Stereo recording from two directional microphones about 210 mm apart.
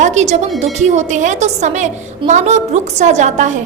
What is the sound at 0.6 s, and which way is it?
A woman's voice, 35° right (ahead or behind).